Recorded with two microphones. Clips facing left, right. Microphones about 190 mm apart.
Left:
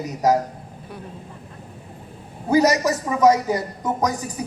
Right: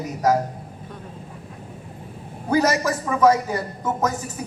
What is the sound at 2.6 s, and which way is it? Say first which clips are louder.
A man's voice: left 3 dB; 20° left (ahead or behind).